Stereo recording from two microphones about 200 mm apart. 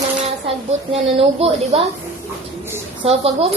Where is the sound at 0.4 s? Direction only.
30° right (ahead or behind).